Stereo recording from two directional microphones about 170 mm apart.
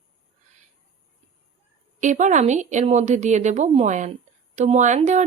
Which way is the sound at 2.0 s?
45° right (ahead or behind).